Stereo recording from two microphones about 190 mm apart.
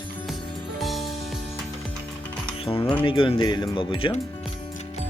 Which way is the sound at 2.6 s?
25° left (ahead or behind).